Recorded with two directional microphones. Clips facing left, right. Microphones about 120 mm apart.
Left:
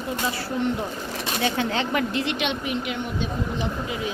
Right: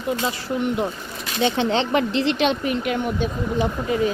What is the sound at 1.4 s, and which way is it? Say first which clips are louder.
Speech: right 5 dB; 25° right (ahead or behind).